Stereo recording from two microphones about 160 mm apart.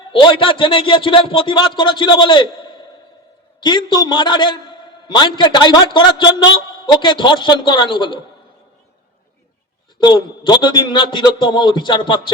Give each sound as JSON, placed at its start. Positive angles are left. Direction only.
{"t": 0.1, "sound": "a man's voice", "side_deg": 30}
{"t": 10.0, "sound": "a man's voice", "side_deg": 30}